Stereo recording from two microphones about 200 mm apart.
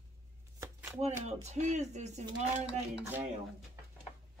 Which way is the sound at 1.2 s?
35° right (ahead or behind).